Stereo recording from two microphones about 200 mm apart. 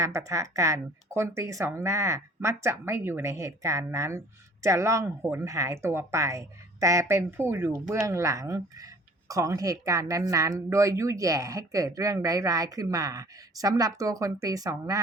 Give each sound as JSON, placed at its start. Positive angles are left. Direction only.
{"t": 0.0, "sound": "speech", "side_deg": -15}